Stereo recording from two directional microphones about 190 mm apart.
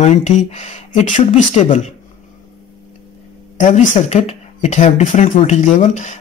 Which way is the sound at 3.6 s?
40° left (ahead or behind).